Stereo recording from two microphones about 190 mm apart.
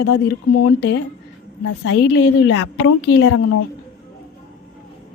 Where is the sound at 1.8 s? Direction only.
70° left (ahead or behind).